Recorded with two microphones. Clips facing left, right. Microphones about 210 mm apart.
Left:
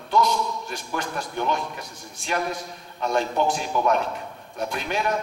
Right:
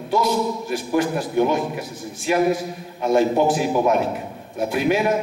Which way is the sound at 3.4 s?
5° right (ahead or behind).